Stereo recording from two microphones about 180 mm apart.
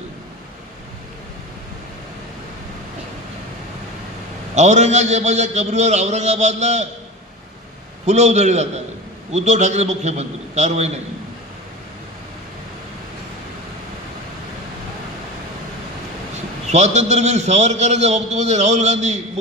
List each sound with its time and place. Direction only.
4.6 s a man's voice: 40° right (ahead or behind)
8.0 s a man's voice: 40° right (ahead or behind)
16.6 s a man's voice: 40° right (ahead or behind)